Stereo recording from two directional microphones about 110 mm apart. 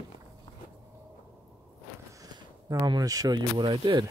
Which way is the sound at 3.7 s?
45° right (ahead or behind).